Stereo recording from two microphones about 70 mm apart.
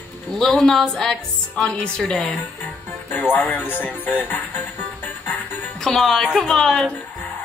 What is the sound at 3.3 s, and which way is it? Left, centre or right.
Speech, left.